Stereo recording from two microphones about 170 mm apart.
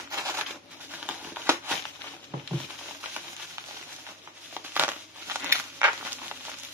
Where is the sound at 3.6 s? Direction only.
15° right (ahead or behind).